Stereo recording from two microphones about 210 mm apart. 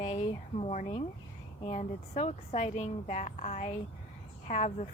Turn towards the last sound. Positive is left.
turn(degrees=35)  # may be behind; listen again after turning